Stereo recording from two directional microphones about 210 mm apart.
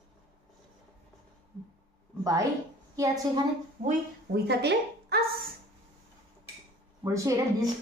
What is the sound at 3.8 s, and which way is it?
A woman's voice, 50° right (ahead or behind).